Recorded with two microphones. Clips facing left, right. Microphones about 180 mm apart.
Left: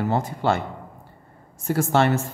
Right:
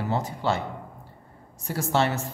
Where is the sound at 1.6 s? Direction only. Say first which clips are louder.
Left 5 dB; 55° left (ahead or behind).